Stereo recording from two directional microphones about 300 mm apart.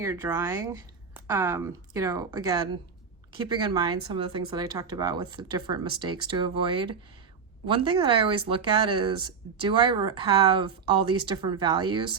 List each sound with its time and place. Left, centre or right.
0.0 s speech: centre